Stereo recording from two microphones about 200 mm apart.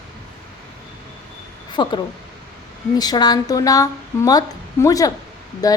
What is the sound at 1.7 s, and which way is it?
Speech, 20° left (ahead or behind).